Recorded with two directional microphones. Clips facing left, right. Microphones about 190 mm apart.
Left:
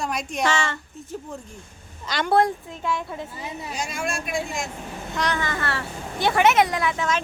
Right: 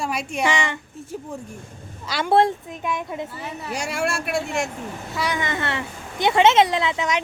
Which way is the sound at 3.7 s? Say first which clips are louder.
Right 5 dB; 70° right (ahead or behind).